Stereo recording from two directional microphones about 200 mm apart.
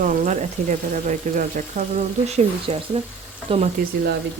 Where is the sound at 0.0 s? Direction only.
40° right (ahead or behind).